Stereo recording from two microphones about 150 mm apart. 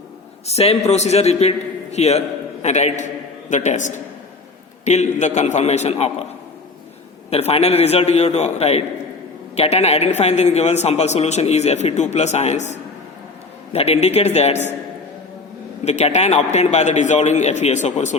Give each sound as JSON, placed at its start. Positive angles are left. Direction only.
{"t": 0.4, "sound": "a man's voice", "side_deg": 45}
{"t": 7.3, "sound": "a man's voice", "side_deg": 45}
{"t": 15.8, "sound": "a man's voice", "side_deg": 45}